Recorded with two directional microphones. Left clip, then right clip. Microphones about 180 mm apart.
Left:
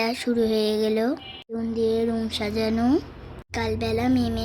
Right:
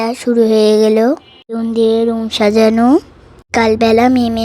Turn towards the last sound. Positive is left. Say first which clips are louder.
# right 13 dB
turn(degrees=-45)  # may be behind; listen again after turning